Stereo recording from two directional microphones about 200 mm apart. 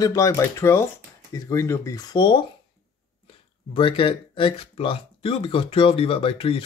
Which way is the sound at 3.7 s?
25° left (ahead or behind).